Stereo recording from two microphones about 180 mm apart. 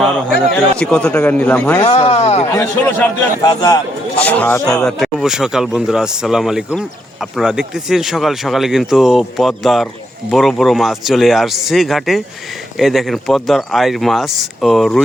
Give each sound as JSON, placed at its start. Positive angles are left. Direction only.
{"t": 0.8, "sound": "a man's voice", "side_deg": 5}
{"t": 1.8, "sound": "speech", "side_deg": 35}
{"t": 2.5, "sound": "a man's voice", "side_deg": 15}
{"t": 4.2, "sound": "a man's voice", "side_deg": 10}
{"t": 4.9, "sound": "speech", "side_deg": 0}